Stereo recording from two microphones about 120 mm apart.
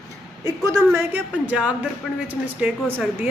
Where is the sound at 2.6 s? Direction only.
10° right (ahead or behind).